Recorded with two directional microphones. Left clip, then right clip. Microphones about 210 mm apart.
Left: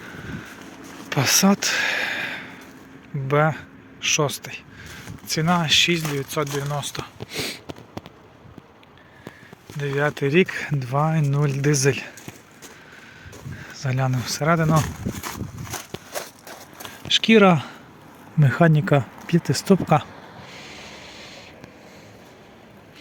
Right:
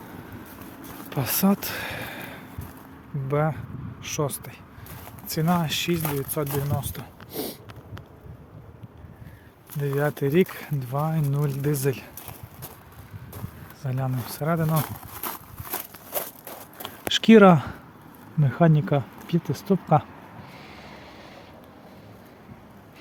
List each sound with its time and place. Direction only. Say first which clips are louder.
1.1 s speech: left 7 dB; 5° left (ahead or behind)
7.0 s a sound: left 5 dB; 15° right (ahead or behind)
9.8 s speech: left 3 dB; 5° right (ahead or behind); by 12.1 s 15° left (ahead or behind)
13.8 s a sound: left 6 dB; 15° left (ahead or behind)
17.1 s speech: even; 20° right (ahead or behind)
18.3 s speech: left 3 dB; 30° left (ahead or behind)
21.0 s mechanisms: left 4 dB; centre (ahead or behind)